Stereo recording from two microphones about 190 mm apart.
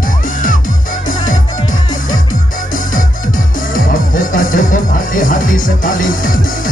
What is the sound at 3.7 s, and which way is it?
Music, 45° left (ahead or behind).